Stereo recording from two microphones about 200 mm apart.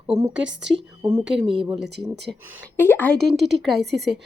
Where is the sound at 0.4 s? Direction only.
70° right (ahead or behind).